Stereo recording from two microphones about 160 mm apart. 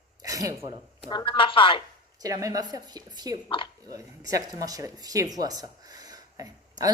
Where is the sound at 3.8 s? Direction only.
20° right (ahead or behind).